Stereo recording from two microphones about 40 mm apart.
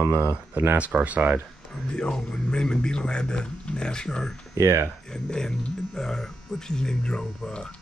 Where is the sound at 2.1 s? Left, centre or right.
Centre.